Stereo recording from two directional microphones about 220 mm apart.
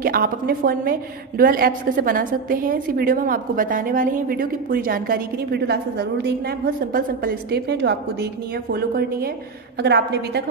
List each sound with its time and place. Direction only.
0.0 s a woman's voice: 40° right (ahead or behind)